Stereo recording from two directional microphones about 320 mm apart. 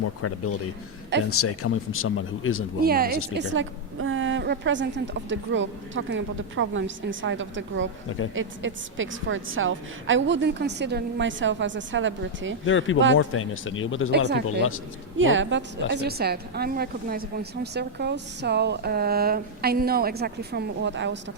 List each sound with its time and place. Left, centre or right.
0.0 s speech: left
2.8 s a woman's voice: right
12.6 s speech: left
14.1 s a woman's voice: right